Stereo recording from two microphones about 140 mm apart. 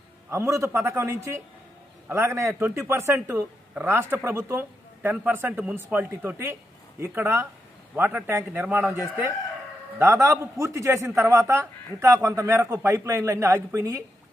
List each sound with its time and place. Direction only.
0.3 s a man's voice: 20° right (ahead or behind)